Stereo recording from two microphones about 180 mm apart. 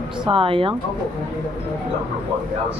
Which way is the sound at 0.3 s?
30° right (ahead or behind).